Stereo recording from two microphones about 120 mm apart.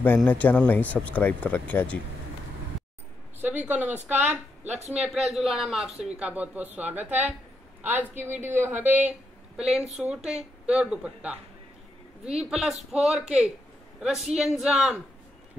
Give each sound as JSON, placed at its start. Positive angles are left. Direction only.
{"t": 0.3, "sound": "speech", "side_deg": 15}
{"t": 3.4, "sound": "a woman's voice", "side_deg": -15}
{"t": 12.4, "sound": "speech", "side_deg": -5}